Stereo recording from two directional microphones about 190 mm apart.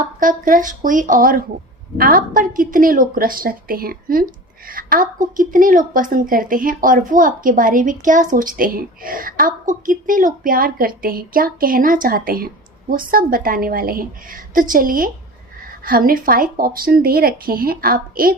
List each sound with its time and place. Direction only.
0.0 s a woman's voice: 45° right (ahead or behind)